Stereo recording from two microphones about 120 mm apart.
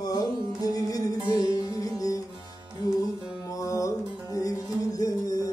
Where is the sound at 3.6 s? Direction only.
30° left (ahead or behind).